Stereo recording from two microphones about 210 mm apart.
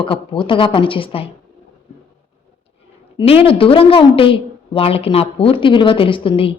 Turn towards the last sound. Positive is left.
turn(degrees=25)  # may be behind; listen again after turning